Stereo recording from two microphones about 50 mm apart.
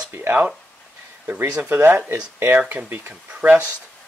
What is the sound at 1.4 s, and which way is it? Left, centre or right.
Speech, right.